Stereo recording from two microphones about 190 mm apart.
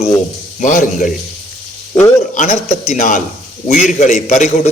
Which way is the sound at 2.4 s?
35° left (ahead or behind).